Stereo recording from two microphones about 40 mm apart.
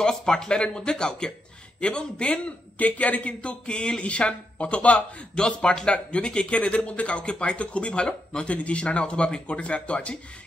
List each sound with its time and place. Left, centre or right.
0.0 s speech: centre
2.8 s speech: left
5.4 s speech: left